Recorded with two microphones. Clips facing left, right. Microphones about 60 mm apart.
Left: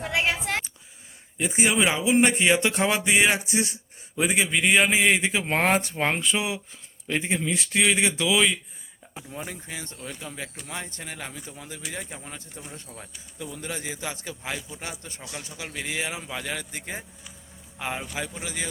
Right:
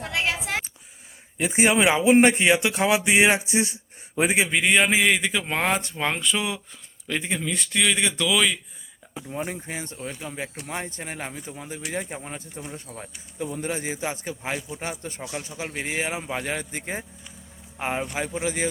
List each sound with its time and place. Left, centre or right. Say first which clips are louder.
0.0 s a sound: left 1 dB; centre
1.4 s a man's voice: right 3 dB; right
2.3 s speech: right 1 dB; centre
4.5 s a man's voice: left 1 dB; centre
5.2 s speech: left 1 dB; left
9.3 s speech: right 5 dB; right
12.5 s speech: right 4 dB; centre
13.4 s speech: right 5 dB; right